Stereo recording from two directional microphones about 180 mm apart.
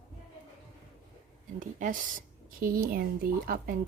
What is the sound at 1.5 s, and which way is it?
Speech, 45° right (ahead or behind).